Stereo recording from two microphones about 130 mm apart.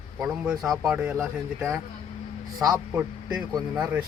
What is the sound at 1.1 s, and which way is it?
Speech, 20° right (ahead or behind).